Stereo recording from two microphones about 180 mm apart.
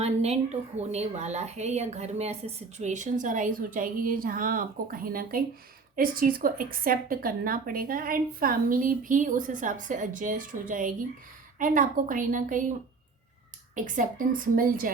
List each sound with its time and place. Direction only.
0.0 s a woman's voice: 35° right (ahead or behind)
13.7 s a woman's voice: 45° right (ahead or behind)